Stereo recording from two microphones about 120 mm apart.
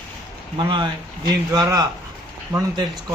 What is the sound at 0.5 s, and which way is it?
A man's voice, 40° right (ahead or behind).